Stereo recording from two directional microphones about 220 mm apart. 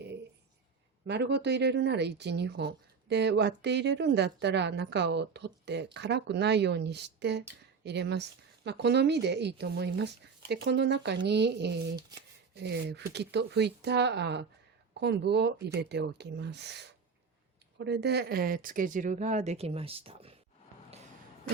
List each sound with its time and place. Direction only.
1.0 s speech: 50° right (ahead or behind); by 20.3 s 25° right (ahead or behind)